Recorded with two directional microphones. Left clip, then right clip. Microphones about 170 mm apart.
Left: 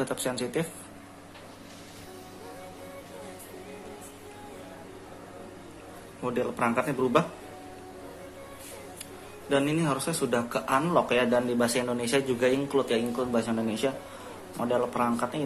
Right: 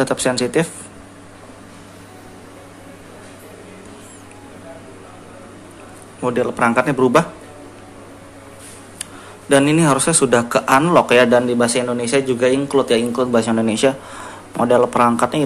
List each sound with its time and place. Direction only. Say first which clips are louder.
0.0 s speech: right 13 dB; 15° right (ahead or behind)
6.2 s speech: right 11 dB; 10° right (ahead or behind)
9.5 s speech: right 13 dB; 20° right (ahead or behind)